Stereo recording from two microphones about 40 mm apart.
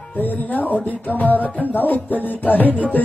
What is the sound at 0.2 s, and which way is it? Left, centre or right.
Music, left.